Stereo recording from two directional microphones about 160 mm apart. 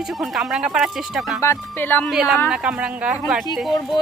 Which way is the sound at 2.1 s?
5° right (ahead or behind).